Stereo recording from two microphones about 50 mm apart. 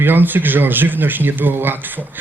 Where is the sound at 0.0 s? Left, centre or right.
Right.